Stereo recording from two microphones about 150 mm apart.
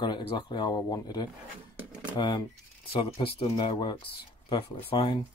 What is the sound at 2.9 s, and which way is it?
Speech, 35° left (ahead or behind).